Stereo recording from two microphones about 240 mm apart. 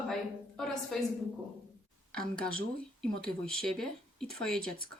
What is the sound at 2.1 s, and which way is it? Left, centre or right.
A man's voice, centre.